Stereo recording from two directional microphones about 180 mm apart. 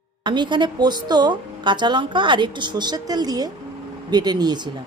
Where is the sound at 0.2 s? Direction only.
25° right (ahead or behind).